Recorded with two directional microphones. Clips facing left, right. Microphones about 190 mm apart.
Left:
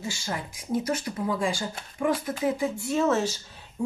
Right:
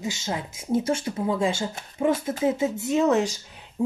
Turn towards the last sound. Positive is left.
turn(degrees=-15)  # may be behind; listen again after turning